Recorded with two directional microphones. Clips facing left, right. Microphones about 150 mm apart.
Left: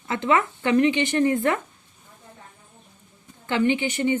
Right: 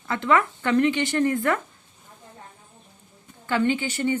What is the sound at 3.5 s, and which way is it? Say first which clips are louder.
Speech: left 1 dB; 20° left (ahead or behind).